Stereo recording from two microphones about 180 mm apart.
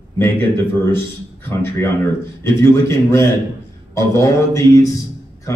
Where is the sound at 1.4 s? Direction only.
15° left (ahead or behind).